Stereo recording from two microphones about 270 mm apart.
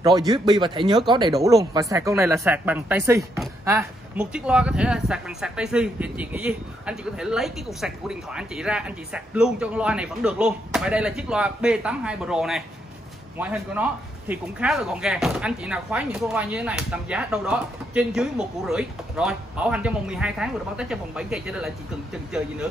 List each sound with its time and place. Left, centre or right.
0.0 s speech: centre